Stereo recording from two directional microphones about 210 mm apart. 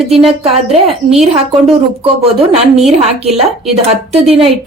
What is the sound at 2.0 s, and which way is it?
A woman's voice, 30° right (ahead or behind).